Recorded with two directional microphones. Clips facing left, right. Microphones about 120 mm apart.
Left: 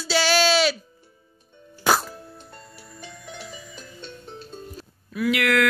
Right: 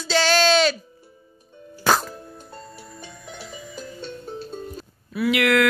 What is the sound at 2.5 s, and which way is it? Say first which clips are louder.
Music: right 5 dB; 30° right (ahead or behind).